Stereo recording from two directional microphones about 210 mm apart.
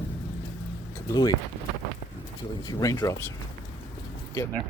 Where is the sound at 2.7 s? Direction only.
15° left (ahead or behind).